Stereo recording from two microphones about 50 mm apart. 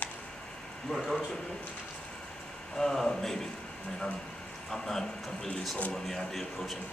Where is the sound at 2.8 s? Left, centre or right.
Centre.